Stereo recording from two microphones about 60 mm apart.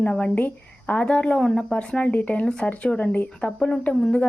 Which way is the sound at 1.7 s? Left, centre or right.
Centre.